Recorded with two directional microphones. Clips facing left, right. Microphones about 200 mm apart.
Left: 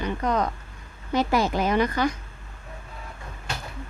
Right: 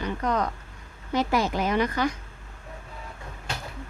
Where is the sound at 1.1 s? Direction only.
35° left (ahead or behind).